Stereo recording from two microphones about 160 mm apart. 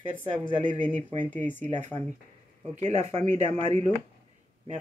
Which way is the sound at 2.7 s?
45° right (ahead or behind).